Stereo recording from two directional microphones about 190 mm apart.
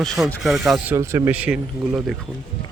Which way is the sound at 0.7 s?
15° right (ahead or behind).